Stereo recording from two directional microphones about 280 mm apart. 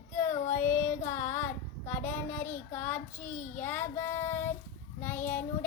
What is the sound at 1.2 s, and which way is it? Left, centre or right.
Child singing, centre.